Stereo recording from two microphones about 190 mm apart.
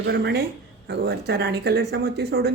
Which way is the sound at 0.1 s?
60° right (ahead or behind).